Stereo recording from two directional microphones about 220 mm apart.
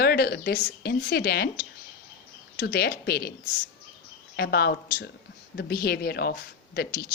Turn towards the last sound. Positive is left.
turn(degrees=45)  # may be behind; listen again after turning